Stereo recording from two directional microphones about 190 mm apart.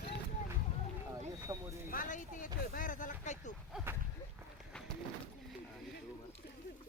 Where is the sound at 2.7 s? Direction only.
45° left (ahead or behind).